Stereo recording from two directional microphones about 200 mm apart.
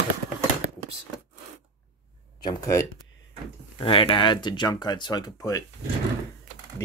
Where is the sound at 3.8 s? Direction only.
25° left (ahead or behind).